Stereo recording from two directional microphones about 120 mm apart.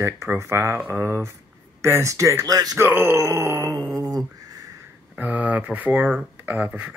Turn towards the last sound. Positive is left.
turn(degrees=-10)  # may be behind; listen again after turning